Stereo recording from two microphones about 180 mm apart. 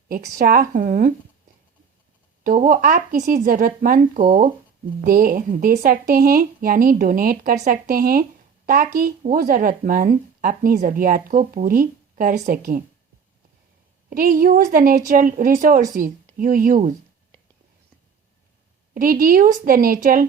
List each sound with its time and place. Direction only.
0.1 s speech: 55° right (ahead or behind)
2.4 s speech: 50° right (ahead or behind)
14.1 s speech: 50° right (ahead or behind)
18.9 s speech: 50° right (ahead or behind)